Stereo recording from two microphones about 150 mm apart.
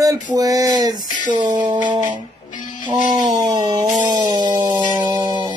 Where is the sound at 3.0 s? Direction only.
55° right (ahead or behind).